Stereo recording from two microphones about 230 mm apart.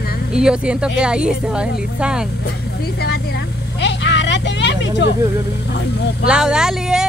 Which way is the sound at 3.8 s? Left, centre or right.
Left.